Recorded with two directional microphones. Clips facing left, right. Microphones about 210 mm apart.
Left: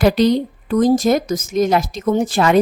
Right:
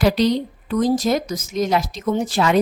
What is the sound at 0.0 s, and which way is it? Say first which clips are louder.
A woman's voice: left 3 dB; 50° left (ahead or behind).